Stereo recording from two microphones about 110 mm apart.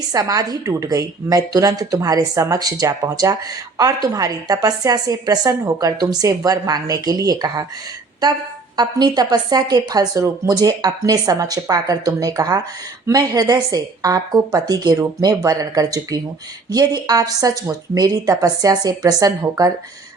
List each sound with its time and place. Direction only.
0.1 s a woman's voice: 35° right (ahead or behind)
8.7 s a woman's voice: 40° right (ahead or behind)